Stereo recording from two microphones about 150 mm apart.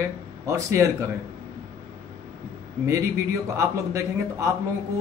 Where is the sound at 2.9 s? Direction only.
20° right (ahead or behind).